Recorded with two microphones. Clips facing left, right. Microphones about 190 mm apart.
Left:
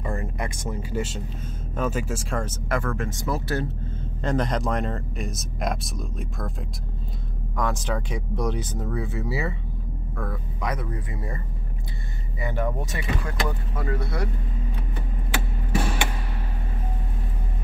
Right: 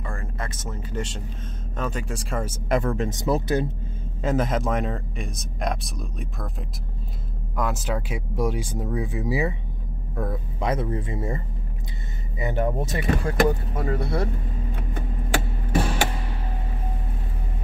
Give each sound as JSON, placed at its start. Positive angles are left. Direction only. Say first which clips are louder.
{"t": 0.0, "sound": "speech", "louder": "left 4 dB", "side_deg": 20}
{"t": 4.2, "sound": "speech", "louder": "right 1 dB", "side_deg": -5}
{"t": 7.5, "sound": "speech", "louder": "even", "side_deg": -5}
{"t": 12.6, "sound": "speech", "louder": "right 4 dB", "side_deg": -35}
{"t": 13.7, "sound": "speech", "louder": "right 3 dB", "side_deg": -25}
{"t": 14.8, "sound": "a sound", "louder": "right 3 dB", "side_deg": -45}